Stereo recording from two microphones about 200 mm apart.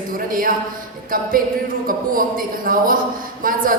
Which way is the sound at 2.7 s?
45° right (ahead or behind).